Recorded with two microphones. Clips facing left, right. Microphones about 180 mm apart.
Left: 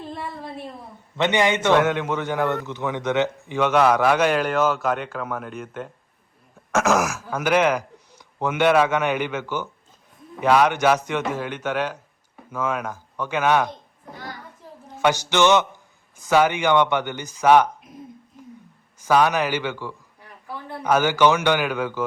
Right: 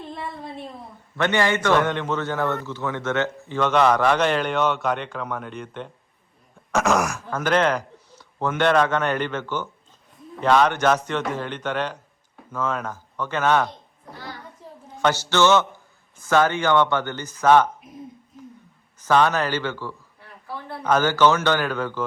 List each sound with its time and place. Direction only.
0.0 s a woman's voice: centre (ahead or behind)
1.1 s a man's voice: 15° left (ahead or behind)
1.7 s a man's voice: 5° left (ahead or behind)
18.9 s a man's voice: 10° left (ahead or behind)